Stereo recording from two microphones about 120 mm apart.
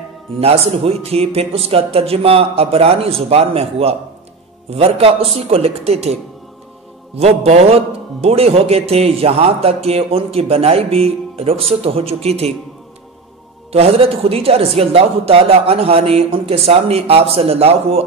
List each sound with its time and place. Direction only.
0.4 s a man's voice: 55° right (ahead or behind)
7.2 s a man's voice: 60° right (ahead or behind)
13.7 s a man's voice: 55° right (ahead or behind)